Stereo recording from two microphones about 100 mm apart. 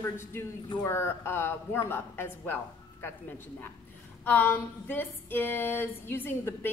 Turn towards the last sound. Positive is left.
turn(degrees=20)  # may be behind; listen again after turning